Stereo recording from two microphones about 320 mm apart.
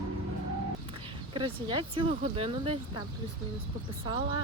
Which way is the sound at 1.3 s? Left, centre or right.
Centre.